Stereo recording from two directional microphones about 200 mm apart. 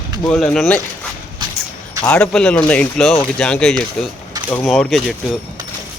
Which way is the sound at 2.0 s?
5° left (ahead or behind).